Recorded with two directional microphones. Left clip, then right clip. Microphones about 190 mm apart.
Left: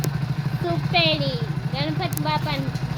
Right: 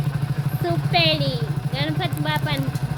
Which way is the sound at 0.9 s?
Centre (ahead or behind).